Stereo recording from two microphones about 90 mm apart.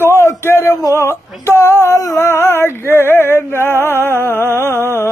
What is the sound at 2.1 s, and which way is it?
Speech, 25° left (ahead or behind).